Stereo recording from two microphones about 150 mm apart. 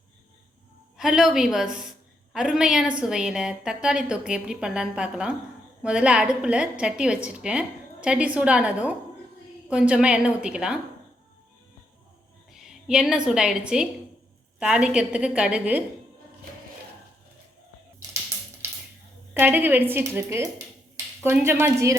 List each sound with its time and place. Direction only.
0.9 s a woman's voice: 5° right (ahead or behind)
12.5 s a woman's voice: 5° right (ahead or behind)
19.3 s a woman's voice: 10° right (ahead or behind)